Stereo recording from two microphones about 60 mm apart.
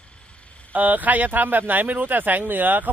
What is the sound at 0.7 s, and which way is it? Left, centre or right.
Speech, right.